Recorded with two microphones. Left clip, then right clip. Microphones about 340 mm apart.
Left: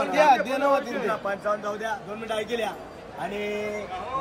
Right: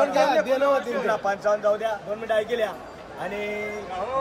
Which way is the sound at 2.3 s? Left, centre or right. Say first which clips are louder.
Right 5 dB; centre.